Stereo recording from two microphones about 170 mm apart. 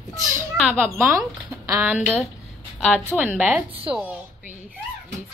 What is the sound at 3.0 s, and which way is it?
A woman's voice, 15° right (ahead or behind).